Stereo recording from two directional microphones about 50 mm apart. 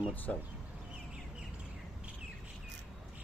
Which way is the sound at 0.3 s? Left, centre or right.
Left.